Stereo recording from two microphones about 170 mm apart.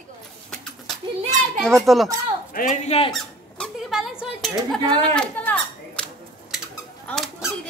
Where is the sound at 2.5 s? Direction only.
55° left (ahead or behind).